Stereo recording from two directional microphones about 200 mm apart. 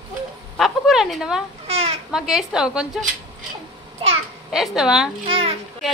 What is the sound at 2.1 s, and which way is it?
Speech, centre (ahead or behind).